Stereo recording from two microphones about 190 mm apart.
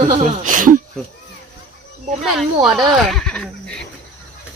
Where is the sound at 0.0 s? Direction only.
40° right (ahead or behind).